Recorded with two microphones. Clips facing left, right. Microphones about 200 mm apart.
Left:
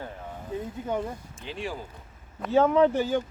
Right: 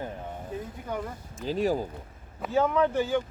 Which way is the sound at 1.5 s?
40° right (ahead or behind).